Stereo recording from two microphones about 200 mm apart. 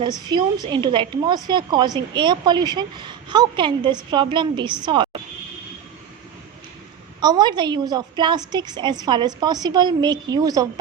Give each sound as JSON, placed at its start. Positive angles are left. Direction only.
{"t": 0.0, "sound": "a woman's voice", "side_deg": -20}
{"t": 7.2, "sound": "a woman's voice", "side_deg": -20}